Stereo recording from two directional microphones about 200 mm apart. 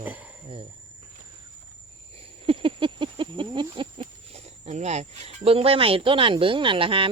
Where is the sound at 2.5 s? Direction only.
25° right (ahead or behind).